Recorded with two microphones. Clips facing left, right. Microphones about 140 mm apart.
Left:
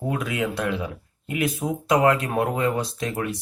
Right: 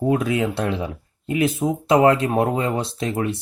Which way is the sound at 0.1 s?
30° right (ahead or behind).